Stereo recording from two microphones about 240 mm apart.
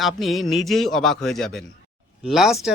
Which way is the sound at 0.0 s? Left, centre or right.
Centre.